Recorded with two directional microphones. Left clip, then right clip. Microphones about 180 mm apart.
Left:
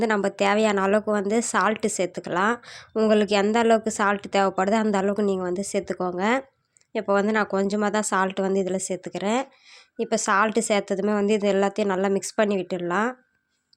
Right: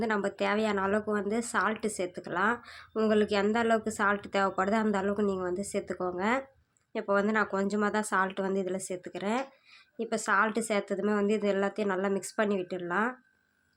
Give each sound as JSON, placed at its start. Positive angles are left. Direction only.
{"t": 0.0, "sound": "a woman's voice", "side_deg": 40}